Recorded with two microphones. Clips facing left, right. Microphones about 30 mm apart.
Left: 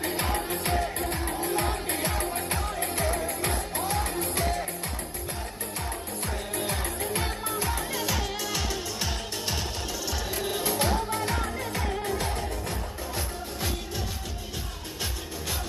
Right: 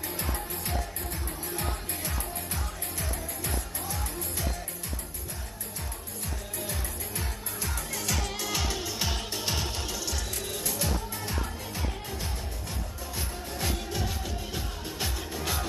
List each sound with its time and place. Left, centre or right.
0.0 s music: left
6.6 s music: left
7.9 s music: left
8.2 s music: centre
10.3 s music: left
11.1 s music: left